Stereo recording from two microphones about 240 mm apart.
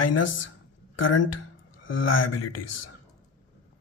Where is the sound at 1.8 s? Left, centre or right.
Left.